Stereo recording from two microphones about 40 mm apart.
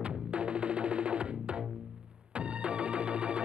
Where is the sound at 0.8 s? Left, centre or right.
Right.